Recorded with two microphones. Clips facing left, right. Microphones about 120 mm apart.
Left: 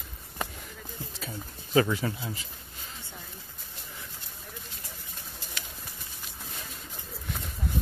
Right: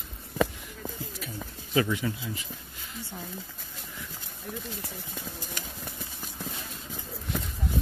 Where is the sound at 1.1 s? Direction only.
30° left (ahead or behind).